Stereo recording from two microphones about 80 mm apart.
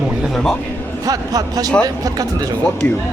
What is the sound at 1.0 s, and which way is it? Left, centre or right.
Speech, right.